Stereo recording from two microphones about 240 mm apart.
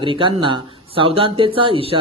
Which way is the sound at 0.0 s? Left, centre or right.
Right.